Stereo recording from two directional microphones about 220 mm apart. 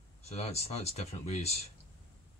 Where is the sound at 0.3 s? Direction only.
30° left (ahead or behind).